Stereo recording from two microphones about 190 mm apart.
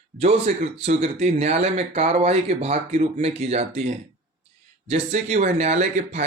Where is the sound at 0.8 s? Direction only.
40° right (ahead or behind).